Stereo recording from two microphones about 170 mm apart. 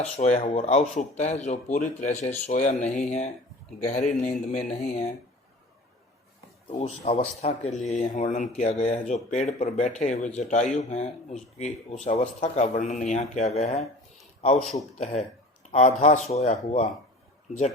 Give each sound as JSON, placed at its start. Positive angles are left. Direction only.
{"t": 0.2, "sound": "speech", "side_deg": 40}
{"t": 6.7, "sound": "speech", "side_deg": 40}
{"t": 14.9, "sound": "speech", "side_deg": 40}